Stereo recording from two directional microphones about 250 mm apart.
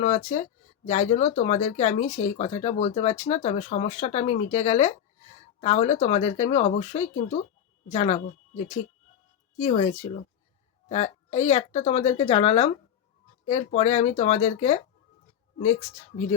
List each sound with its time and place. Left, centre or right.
0.0 s speech: left